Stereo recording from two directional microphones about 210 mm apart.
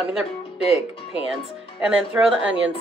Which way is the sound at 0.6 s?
30° left (ahead or behind).